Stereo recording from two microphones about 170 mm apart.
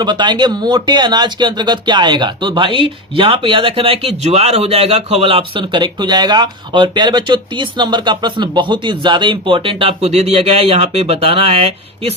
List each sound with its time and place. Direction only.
0.0 s speech: 25° right (ahead or behind)